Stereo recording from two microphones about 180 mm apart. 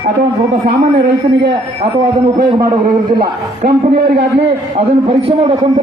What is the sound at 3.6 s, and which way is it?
Speech, 60° right (ahead or behind).